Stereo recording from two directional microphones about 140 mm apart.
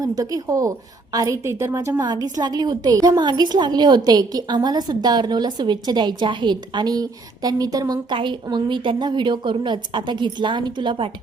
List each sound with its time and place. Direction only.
0.0 s a woman's voice: 25° right (ahead or behind)
2.0 s a woman's voice: 30° right (ahead or behind)